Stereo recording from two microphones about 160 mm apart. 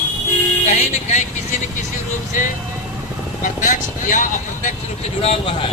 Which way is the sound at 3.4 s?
55° left (ahead or behind).